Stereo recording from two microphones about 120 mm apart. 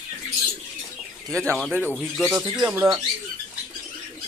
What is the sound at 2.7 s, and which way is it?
Speech, 20° right (ahead or behind).